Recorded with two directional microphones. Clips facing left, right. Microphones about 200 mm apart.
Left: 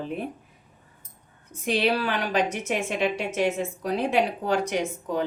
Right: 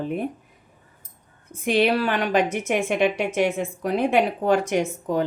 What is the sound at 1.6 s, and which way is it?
A woman's voice, 55° right (ahead or behind).